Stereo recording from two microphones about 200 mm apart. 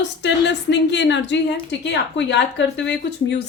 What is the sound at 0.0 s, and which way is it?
A woman's voice, 60° left (ahead or behind).